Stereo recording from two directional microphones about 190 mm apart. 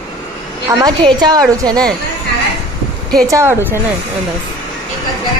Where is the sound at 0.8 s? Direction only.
20° right (ahead or behind).